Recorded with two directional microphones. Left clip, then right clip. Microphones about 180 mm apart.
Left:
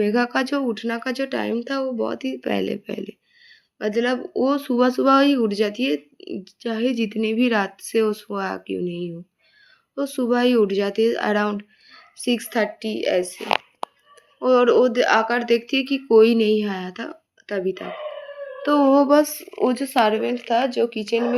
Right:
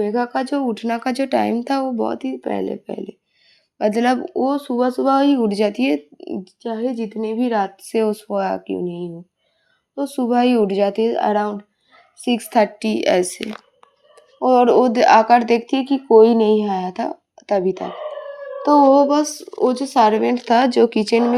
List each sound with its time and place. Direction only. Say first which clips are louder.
0.0 s speech: right 1 dB; centre (ahead or behind)
0.7 s speech: right 4 dB; 30° right (ahead or behind)
2.0 s speech: right 3 dB; 20° right (ahead or behind)
3.8 s speech: right 5 dB; 35° right (ahead or behind)
4.4 s speech: right 1 dB; centre (ahead or behind)
5.5 s speech: right 3 dB; 30° right (ahead or behind)
6.6 s speech: left 1 dB; centre (ahead or behind)
7.8 s speech: right 1 dB; 20° right (ahead or behind)
12.4 s speech: right 6 dB; 35° right (ahead or behind); by 13.4 s 55° right (ahead or behind)
14.4 s speech: right 3 dB; 20° right (ahead or behind)
15.6 s speech: right 3 dB; 15° right (ahead or behind)
18.9 s speech: right 2 dB; 10° left (ahead or behind)
19.9 s speech: right 5 dB; 15° right (ahead or behind)
20.1 s speech: right 5 dB; 40° right (ahead or behind)